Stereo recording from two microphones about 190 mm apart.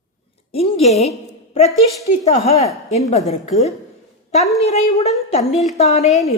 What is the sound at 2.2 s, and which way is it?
A woman's voice, 35° left (ahead or behind).